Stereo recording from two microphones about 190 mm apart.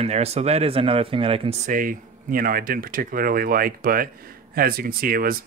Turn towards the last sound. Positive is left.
turn(degrees=-50)  # may be behind; listen again after turning